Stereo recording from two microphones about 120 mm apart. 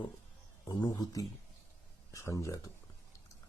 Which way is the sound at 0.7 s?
35° left (ahead or behind).